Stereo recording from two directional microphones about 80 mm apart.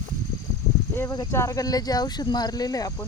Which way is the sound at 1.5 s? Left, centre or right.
Left.